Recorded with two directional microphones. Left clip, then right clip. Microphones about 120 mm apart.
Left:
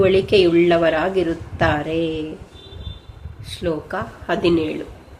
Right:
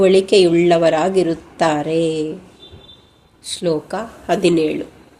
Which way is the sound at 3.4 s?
45° right (ahead or behind).